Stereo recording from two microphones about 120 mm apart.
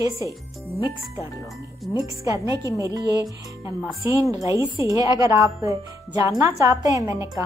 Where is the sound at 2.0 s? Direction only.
25° right (ahead or behind).